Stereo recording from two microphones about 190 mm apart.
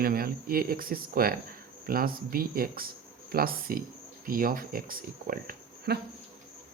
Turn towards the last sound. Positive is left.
turn(degrees=-50)  # may be behind; listen again after turning